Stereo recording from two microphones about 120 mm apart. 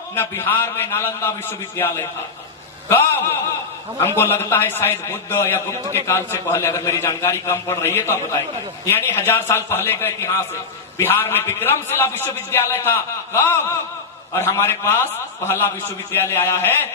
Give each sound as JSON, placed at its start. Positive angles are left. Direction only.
{"t": 0.2, "sound": "a man's voice", "side_deg": 20}
{"t": 4.0, "sound": "a man's voice", "side_deg": 20}